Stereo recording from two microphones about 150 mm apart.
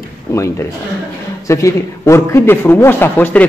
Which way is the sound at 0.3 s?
20° left (ahead or behind).